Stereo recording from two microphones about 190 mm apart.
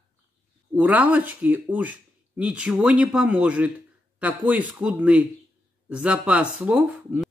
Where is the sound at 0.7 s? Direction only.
10° right (ahead or behind).